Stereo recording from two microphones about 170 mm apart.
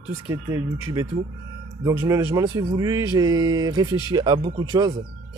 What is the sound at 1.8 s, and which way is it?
Speech, 20° right (ahead or behind).